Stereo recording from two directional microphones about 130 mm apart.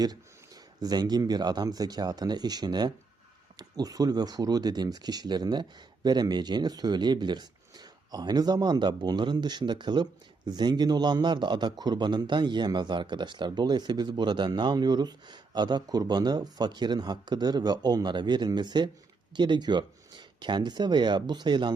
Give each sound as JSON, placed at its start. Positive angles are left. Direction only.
{"t": 0.8, "sound": "speech", "side_deg": -30}